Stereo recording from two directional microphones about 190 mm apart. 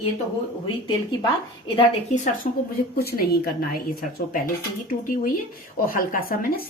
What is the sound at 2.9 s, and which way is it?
A woman's voice, 55° left (ahead or behind).